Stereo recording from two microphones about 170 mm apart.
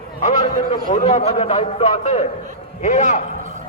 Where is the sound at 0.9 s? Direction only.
35° left (ahead or behind).